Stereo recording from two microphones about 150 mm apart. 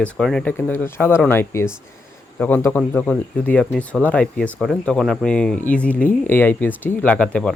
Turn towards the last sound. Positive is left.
turn(degrees=5)  # may be behind; listen again after turning